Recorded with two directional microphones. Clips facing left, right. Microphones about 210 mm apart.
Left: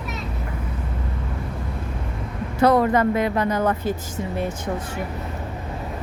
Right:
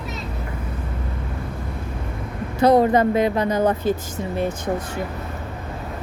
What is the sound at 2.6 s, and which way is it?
Speech, 15° right (ahead or behind).